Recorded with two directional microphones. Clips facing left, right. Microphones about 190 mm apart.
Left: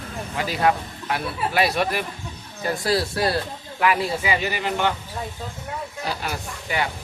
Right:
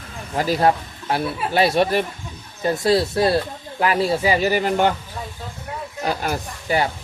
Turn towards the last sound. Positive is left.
turn(degrees=-40)  # may be behind; listen again after turning